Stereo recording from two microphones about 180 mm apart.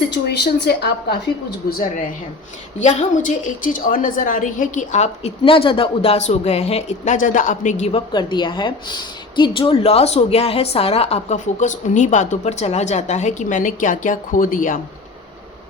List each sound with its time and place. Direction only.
0.1 s a woman's voice: 65° left (ahead or behind)
2.8 s a woman's voice: 45° left (ahead or behind)
8.1 s a woman's voice: 25° left (ahead or behind); by 14.8 s 50° left (ahead or behind)